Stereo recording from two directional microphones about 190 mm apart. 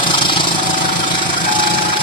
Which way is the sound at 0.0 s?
25° left (ahead or behind).